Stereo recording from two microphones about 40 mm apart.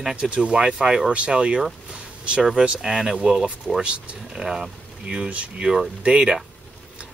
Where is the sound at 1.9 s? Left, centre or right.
Right.